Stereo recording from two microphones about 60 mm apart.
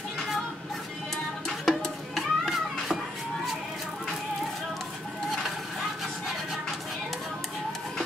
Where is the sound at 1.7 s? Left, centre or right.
Centre.